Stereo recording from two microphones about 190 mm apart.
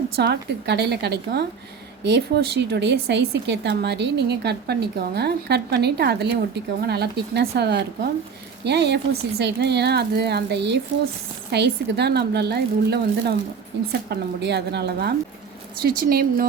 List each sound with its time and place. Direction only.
0.2 s speech: 60° right (ahead or behind)